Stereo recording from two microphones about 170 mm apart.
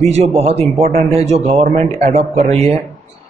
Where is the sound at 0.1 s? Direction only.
35° right (ahead or behind).